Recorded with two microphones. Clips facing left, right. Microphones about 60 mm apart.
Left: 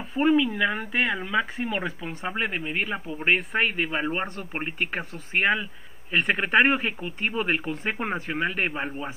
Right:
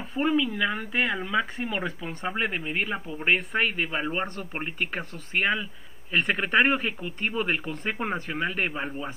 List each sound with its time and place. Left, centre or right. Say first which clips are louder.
0.1 s speech: left 4 dB; centre